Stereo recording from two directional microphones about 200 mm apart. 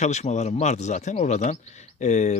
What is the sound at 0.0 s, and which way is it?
A man's voice, 35° left (ahead or behind).